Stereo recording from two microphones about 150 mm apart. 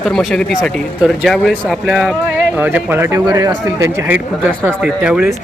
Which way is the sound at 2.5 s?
15° right (ahead or behind).